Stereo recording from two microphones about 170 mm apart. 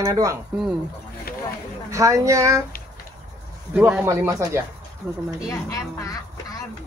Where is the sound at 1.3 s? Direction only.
65° left (ahead or behind).